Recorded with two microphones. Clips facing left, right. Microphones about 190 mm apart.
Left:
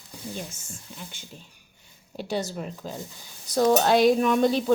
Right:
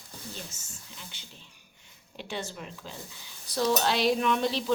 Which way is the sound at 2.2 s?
40° left (ahead or behind).